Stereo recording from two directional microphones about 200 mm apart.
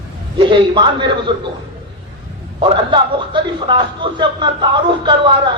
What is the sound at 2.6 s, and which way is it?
Speech, 25° right (ahead or behind).